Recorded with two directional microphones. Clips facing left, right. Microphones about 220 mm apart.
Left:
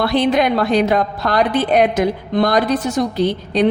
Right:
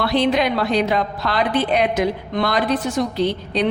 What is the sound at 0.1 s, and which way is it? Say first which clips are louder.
A woman's voice: left 3 dB; 50° left (ahead or behind).